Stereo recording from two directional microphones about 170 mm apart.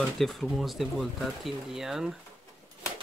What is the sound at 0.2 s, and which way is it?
Speech, centre (ahead or behind).